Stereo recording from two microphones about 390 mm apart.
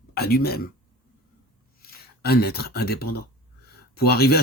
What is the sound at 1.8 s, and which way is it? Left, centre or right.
Speech, left.